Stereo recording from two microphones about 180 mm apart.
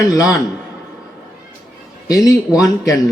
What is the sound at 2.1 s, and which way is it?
Speech, 20° left (ahead or behind).